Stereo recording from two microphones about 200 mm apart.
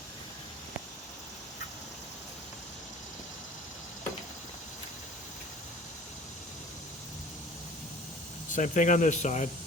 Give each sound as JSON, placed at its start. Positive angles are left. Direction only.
{"t": 8.4, "sound": "speech", "side_deg": 40}